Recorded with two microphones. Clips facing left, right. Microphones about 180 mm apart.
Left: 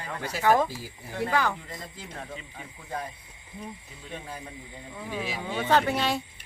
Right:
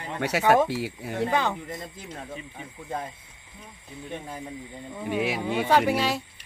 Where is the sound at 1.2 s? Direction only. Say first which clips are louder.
Right 1 dB; 20° right (ahead or behind).